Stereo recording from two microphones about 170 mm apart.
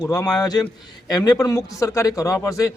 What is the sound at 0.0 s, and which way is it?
A man's voice, 20° left (ahead or behind).